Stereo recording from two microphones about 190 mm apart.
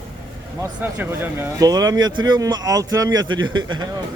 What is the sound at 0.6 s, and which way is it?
Speech, 10° right (ahead or behind).